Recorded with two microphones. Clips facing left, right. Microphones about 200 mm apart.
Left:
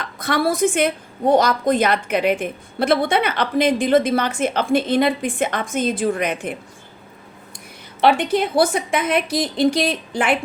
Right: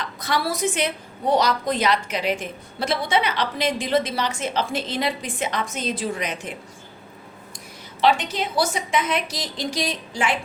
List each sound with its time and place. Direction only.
0.0 s a woman's voice: 55° left (ahead or behind)
8.0 s a woman's voice: 55° left (ahead or behind)